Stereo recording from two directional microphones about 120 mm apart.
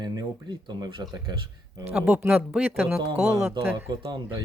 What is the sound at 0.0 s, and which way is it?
Speech, 35° right (ahead or behind).